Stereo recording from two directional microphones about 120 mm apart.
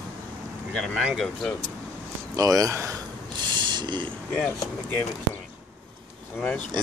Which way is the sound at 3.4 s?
40° right (ahead or behind).